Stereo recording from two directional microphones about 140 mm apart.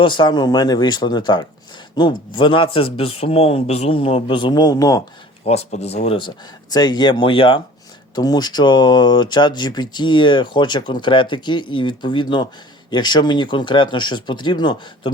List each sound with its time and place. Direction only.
0.0 s speech: 35° left (ahead or behind)
5.5 s speech: 50° left (ahead or behind); by 15.1 s 30° left (ahead or behind)